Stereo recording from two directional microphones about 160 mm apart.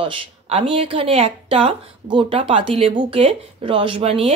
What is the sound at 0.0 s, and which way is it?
Speech, 35° right (ahead or behind).